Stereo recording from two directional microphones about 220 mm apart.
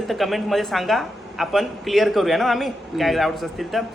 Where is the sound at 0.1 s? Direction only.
Centre (ahead or behind).